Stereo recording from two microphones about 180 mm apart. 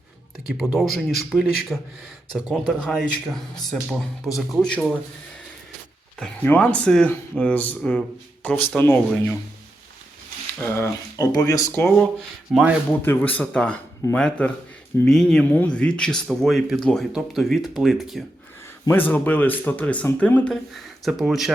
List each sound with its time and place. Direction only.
0.5 s speech: centre (ahead or behind)
6.4 s speech: 10° left (ahead or behind)
10.6 s speech: 15° left (ahead or behind)
13.0 s speech: 10° left (ahead or behind)
18.9 s speech: 10° left (ahead or behind)